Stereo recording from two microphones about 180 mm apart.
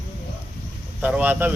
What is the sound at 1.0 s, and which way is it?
Speech, 10° right (ahead or behind).